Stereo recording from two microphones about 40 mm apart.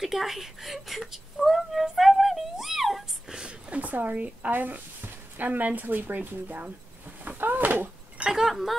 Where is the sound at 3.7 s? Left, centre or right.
Right.